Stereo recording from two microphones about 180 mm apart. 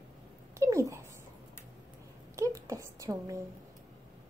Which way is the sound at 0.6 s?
15° right (ahead or behind).